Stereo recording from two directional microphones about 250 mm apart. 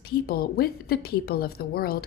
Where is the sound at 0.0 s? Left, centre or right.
Left.